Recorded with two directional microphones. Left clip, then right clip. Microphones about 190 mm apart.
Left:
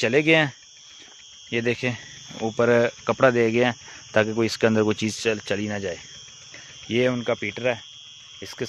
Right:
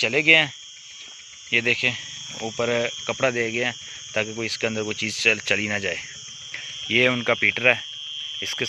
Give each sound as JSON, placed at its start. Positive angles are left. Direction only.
{"t": 0.0, "sound": "speech", "side_deg": 45}
{"t": 1.5, "sound": "speech", "side_deg": 40}
{"t": 6.5, "sound": "a sound", "side_deg": 25}
{"t": 7.2, "sound": "speech", "side_deg": 10}